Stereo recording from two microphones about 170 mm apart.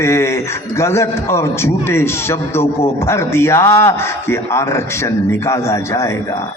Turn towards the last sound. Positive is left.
turn(degrees=15)  # may be behind; listen again after turning